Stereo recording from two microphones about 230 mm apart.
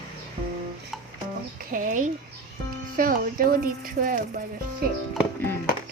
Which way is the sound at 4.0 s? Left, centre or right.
Right.